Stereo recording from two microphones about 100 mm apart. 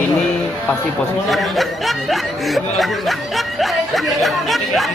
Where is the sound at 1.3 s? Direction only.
Centre (ahead or behind).